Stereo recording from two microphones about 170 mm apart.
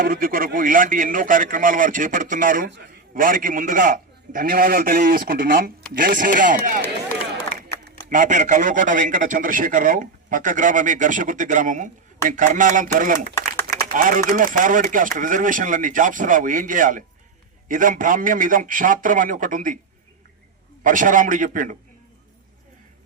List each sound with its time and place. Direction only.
0.0 s a man's voice: 55° right (ahead or behind)
6.8 s a sound: 10° left (ahead or behind)
8.1 s speech: 45° right (ahead or behind)
20.8 s speech: 50° right (ahead or behind)